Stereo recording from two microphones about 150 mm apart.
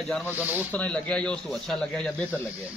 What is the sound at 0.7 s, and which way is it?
Speech, 10° left (ahead or behind).